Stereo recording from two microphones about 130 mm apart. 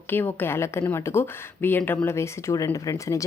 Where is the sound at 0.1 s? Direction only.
15° left (ahead or behind).